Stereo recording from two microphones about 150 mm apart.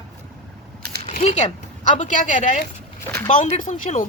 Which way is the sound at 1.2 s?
50° left (ahead or behind).